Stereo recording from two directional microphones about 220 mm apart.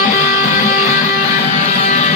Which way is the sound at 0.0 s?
35° left (ahead or behind).